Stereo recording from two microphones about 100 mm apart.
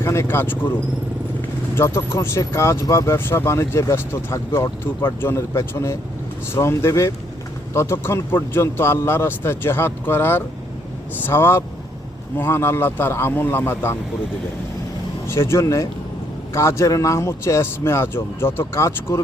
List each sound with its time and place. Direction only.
0.0 s speech: 25° left (ahead or behind)
15.3 s speech: 25° left (ahead or behind)